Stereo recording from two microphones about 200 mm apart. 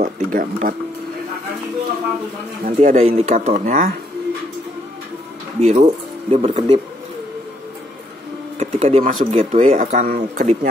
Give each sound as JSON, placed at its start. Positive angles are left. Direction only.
{"t": 0.0, "sound": "speech", "side_deg": -40}
{"t": 2.6, "sound": "speech", "side_deg": -35}
{"t": 5.6, "sound": "speech", "side_deg": -35}
{"t": 8.5, "sound": "speech", "side_deg": -30}